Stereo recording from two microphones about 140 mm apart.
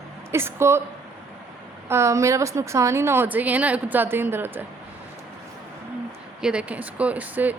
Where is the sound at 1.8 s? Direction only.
20° right (ahead or behind).